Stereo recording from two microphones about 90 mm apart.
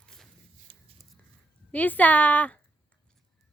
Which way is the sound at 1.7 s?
20° left (ahead or behind).